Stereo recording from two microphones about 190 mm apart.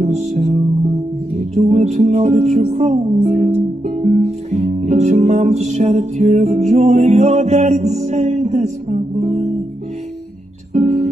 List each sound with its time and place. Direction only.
0.0 s music: 35° right (ahead or behind)
10.7 s music: 40° right (ahead or behind)